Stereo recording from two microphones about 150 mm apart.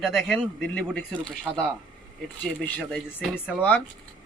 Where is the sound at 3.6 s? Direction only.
10° left (ahead or behind).